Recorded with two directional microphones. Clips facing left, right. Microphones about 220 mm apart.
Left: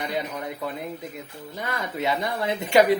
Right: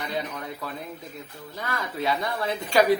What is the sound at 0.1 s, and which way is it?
Speech, 20° left (ahead or behind).